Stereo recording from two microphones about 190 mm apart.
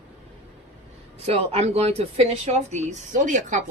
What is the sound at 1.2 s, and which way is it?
Speech, 35° right (ahead or behind).